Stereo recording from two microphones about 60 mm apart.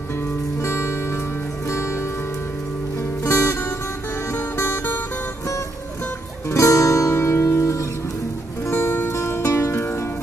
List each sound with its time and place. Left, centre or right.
0.6 s music: left
3.3 s music: left
6.5 s music: left